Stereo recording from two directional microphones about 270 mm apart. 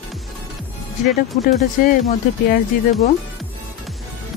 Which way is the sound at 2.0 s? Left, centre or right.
Left.